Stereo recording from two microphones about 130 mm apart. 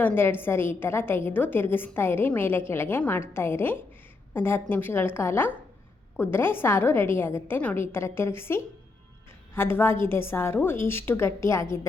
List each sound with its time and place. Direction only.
0.0 s a woman's voice: 15° left (ahead or behind)